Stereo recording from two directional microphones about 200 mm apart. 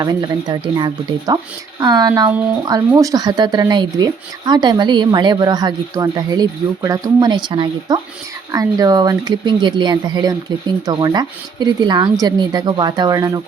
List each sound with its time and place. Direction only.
0.0 s speech: 20° right (ahead or behind)
2.3 s speech: 5° right (ahead or behind)
2.6 s speech: 20° right (ahead or behind)